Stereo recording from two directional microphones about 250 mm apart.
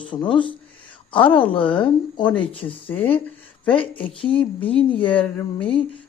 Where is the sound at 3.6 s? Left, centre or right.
Centre.